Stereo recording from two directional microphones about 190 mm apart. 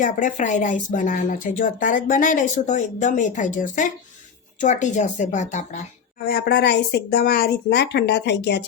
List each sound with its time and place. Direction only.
0.0 s speech: 40° left (ahead or behind)
6.2 s speech: 60° left (ahead or behind)